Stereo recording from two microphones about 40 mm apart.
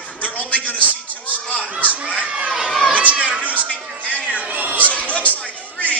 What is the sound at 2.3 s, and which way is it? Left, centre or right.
Children playing, right.